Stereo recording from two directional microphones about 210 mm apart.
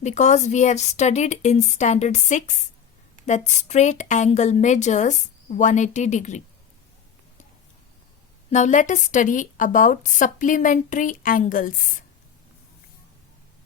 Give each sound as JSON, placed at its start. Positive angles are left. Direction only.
{"t": 0.0, "sound": "a woman's voice", "side_deg": 35}
{"t": 8.4, "sound": "a woman's voice", "side_deg": 35}